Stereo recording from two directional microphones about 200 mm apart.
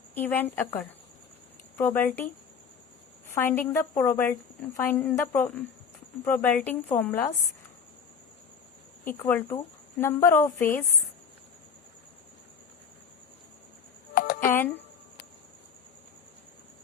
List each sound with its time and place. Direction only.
0.1 s a woman's voice: 10° left (ahead or behind)
3.2 s a woman's voice: 10° left (ahead or behind)
9.0 s a woman's voice: 10° left (ahead or behind)
14.2 s a sound: 45° left (ahead or behind)
14.4 s speech: 10° left (ahead or behind)